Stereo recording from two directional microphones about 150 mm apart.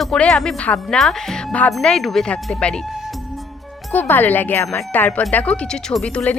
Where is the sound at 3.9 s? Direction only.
10° left (ahead or behind).